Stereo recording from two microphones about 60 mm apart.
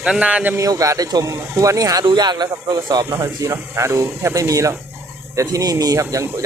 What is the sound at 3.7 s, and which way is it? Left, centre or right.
Speech, right.